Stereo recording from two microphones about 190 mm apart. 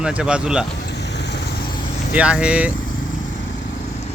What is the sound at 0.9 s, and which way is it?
Vehicle, 65° left (ahead or behind).